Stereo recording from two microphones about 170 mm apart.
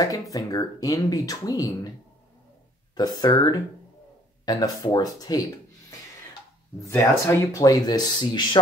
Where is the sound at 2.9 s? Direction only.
25° left (ahead or behind).